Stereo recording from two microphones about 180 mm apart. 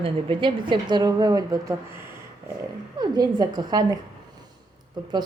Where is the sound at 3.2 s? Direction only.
25° right (ahead or behind).